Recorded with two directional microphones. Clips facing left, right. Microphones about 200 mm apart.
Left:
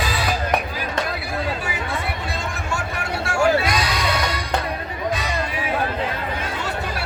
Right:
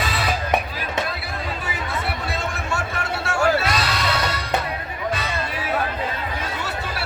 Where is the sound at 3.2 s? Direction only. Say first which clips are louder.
Left 2 dB; 5° right (ahead or behind).